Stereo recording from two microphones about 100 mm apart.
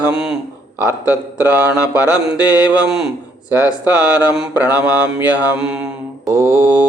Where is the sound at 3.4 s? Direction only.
15° right (ahead or behind).